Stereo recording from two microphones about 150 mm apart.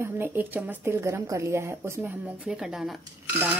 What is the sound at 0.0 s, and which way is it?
A woman's voice, 15° right (ahead or behind).